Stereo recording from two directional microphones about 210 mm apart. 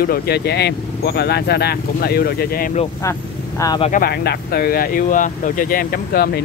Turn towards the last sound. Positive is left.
turn(degrees=45)  # may be behind; listen again after turning